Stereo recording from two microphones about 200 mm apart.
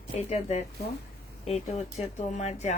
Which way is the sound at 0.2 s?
35° left (ahead or behind).